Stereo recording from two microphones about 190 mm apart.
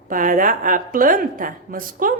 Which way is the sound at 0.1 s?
45° right (ahead or behind).